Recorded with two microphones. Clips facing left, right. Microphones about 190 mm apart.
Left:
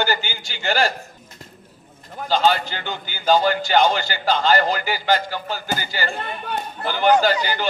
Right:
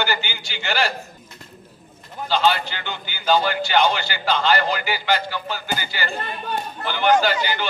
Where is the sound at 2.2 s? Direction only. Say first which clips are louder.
Left 1 dB; 45° left (ahead or behind).